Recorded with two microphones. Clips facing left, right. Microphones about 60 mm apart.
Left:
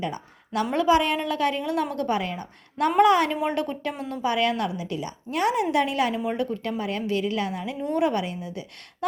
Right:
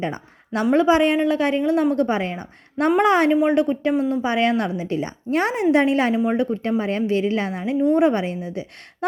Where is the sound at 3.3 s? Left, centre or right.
Centre.